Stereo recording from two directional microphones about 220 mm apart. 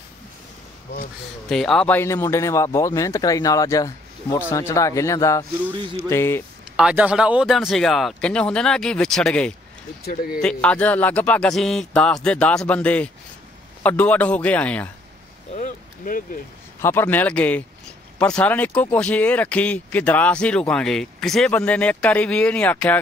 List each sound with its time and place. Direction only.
1.5 s speech: centre (ahead or behind)
6.8 s speech: 5° right (ahead or behind)
15.5 s a sound: 35° left (ahead or behind)
16.8 s speech: 10° left (ahead or behind)